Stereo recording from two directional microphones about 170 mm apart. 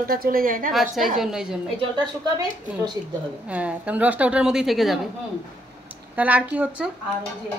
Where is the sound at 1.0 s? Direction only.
5° right (ahead or behind).